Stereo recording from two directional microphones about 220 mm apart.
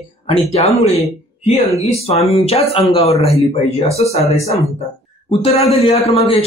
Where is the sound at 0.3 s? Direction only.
25° left (ahead or behind).